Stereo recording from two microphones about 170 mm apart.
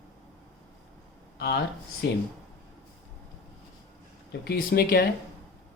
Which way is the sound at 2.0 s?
90° left.